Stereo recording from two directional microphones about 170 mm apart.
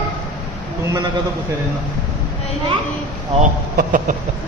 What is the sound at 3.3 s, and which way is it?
Speech, 35° right (ahead or behind).